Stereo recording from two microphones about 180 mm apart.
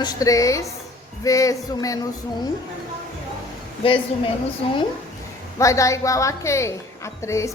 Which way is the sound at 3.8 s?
30° left (ahead or behind).